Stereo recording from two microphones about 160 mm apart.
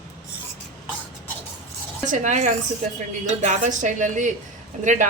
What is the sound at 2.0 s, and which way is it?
A woman's voice, 50° right (ahead or behind).